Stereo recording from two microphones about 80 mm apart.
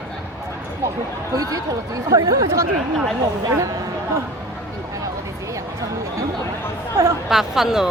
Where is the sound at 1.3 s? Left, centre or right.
Right.